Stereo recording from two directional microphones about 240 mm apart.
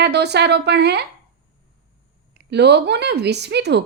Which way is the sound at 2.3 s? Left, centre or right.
Right.